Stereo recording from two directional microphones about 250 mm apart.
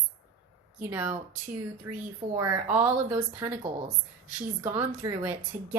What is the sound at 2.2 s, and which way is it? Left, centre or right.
Speech, right.